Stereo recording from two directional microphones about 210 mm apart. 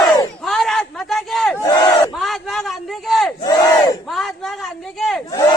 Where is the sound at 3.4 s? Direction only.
20° left (ahead or behind).